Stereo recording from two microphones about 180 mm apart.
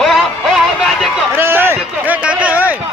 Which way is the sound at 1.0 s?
10° right (ahead or behind).